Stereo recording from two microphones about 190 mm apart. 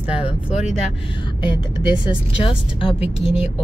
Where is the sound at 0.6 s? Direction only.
30° left (ahead or behind).